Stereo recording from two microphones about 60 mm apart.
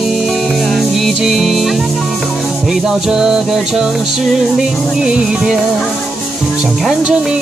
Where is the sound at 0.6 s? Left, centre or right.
Centre.